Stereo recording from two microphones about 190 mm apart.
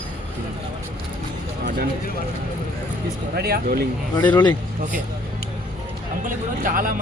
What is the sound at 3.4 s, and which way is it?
Speech, 55° right (ahead or behind).